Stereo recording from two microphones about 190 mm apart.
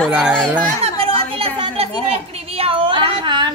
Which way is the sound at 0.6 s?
30° right (ahead or behind).